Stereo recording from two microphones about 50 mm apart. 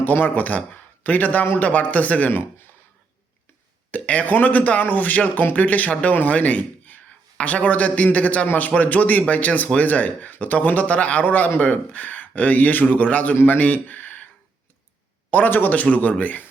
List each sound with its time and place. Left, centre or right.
0.0 s speech: left
3.9 s speech: left
13.3 s speech: left
15.3 s speech: left
15.7 s speech: left